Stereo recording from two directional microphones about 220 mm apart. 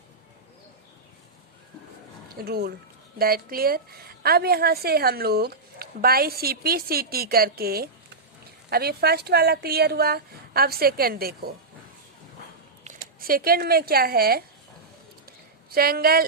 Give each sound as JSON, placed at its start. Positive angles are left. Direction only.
{"t": 2.3, "sound": "a woman's voice", "side_deg": -45}
{"t": 12.8, "sound": "speech", "side_deg": -35}
{"t": 15.3, "sound": "a sound", "side_deg": -45}